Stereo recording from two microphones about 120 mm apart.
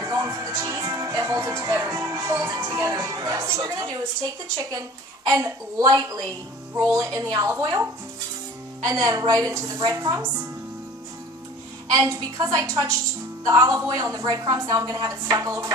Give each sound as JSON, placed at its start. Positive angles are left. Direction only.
{"t": 0.0, "sound": "speech", "side_deg": -30}
{"t": 5.2, "sound": "a woman's voice", "side_deg": -30}
{"t": 7.5, "sound": "a woman's voice", "side_deg": -20}
{"t": 8.8, "sound": "a woman's voice", "side_deg": -30}
{"t": 11.9, "sound": "a woman's voice", "side_deg": -30}